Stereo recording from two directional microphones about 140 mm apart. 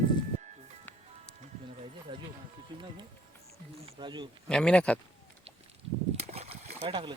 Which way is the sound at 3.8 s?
35° right (ahead or behind).